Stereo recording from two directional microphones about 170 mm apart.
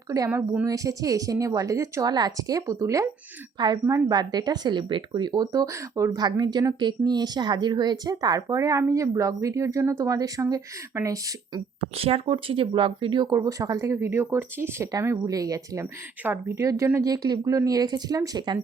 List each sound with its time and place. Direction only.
0.3 s a woman's voice: 10° right (ahead or behind)
0.6 s speech: 20° right (ahead or behind)
11.8 s speech: 35° right (ahead or behind)